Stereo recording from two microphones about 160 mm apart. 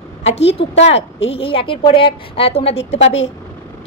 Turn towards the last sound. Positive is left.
turn(degrees=40)  # may be behind; listen again after turning